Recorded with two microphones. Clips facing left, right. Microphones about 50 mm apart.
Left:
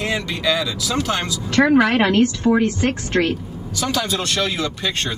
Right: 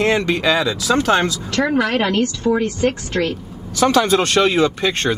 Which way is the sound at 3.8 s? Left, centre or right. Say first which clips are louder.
Right 8 dB; right.